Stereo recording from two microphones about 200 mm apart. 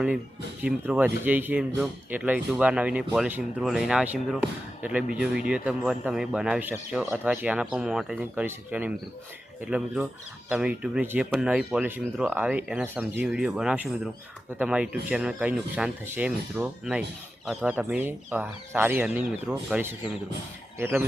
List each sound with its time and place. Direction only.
0.6 s a man's voice: 5° right (ahead or behind)